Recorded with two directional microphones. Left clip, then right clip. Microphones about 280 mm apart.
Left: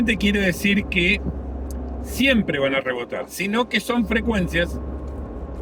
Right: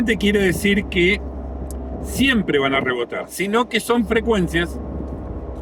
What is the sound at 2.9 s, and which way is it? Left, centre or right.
Speech, left.